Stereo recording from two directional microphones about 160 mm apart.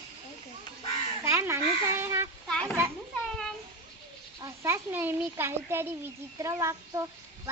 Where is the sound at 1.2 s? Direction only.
15° right (ahead or behind).